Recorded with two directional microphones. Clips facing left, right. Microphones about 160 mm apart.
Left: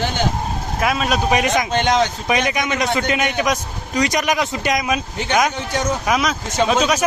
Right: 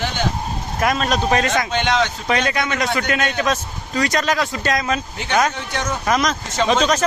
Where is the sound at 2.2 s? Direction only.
15° left (ahead or behind).